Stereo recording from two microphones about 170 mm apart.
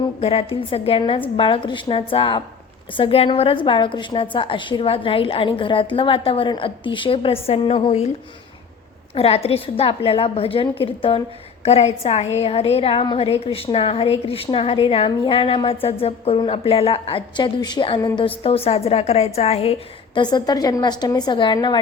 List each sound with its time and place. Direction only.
0.2 s a woman's voice: 35° left (ahead or behind)
9.1 s a woman's voice: 35° left (ahead or behind)
20.1 s a woman's voice: 25° left (ahead or behind)